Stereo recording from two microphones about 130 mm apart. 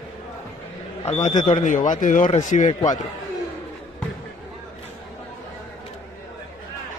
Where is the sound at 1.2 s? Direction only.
70° left (ahead or behind).